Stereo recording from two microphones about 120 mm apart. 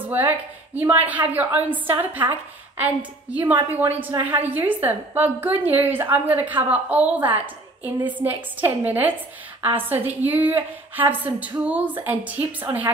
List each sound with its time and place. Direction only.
0.0 s a woman's voice: 15° right (ahead or behind)